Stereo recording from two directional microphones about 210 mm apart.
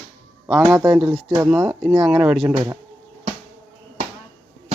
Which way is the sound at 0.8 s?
Centre (ahead or behind).